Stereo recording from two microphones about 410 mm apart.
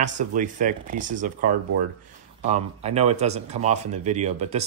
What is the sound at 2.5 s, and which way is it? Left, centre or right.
Speech, centre.